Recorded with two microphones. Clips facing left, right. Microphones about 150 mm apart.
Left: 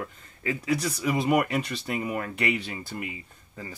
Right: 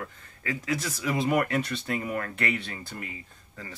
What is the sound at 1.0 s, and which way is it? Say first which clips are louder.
Speech: left 1 dB; 5° left (ahead or behind).